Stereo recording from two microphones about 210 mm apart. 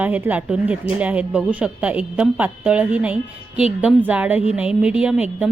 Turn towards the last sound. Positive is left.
turn(degrees=-5)  # may be behind; listen again after turning